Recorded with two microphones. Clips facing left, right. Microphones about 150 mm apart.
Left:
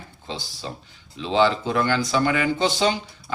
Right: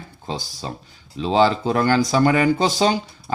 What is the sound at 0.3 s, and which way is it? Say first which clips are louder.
Speech: right 4 dB; 40° right (ahead or behind).